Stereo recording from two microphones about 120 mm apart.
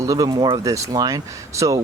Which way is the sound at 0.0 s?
30° right (ahead or behind).